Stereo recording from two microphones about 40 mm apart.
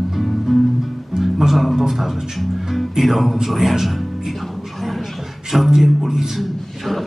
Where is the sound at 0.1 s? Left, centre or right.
Centre.